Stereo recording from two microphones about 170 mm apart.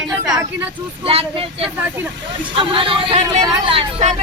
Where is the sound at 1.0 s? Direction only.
35° right (ahead or behind).